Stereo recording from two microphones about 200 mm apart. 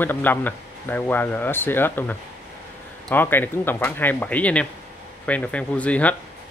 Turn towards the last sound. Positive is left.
turn(degrees=5)  # may be behind; listen again after turning